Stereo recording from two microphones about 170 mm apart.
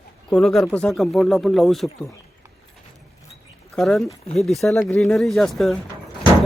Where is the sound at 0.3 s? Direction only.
Centre (ahead or behind).